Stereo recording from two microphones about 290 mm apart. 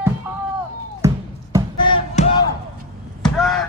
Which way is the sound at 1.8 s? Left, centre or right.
Left.